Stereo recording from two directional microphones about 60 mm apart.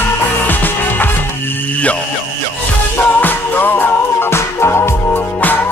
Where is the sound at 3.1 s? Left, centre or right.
Left.